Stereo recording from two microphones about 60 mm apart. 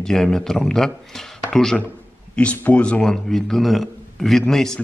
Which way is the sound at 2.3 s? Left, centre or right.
Left.